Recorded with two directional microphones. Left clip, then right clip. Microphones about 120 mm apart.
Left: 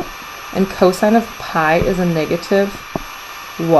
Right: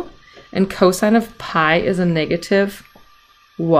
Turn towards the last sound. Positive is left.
turn(degrees=15)  # may be behind; listen again after turning